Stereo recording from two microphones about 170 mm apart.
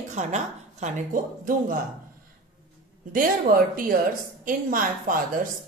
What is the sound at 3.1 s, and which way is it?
A woman's voice, 55° right (ahead or behind).